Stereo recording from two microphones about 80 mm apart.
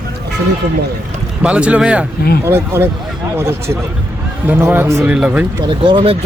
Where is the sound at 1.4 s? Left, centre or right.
Centre.